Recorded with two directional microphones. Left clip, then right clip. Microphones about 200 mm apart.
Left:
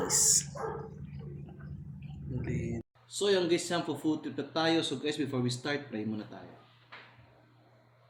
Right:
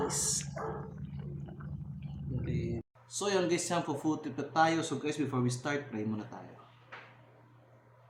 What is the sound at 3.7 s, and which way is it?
Speech, 15° right (ahead or behind).